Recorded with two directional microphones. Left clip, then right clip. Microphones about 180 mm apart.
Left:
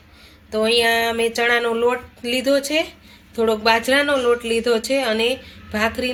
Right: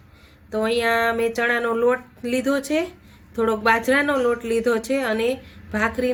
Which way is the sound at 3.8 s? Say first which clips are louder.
Left 2 dB; 40° right (ahead or behind).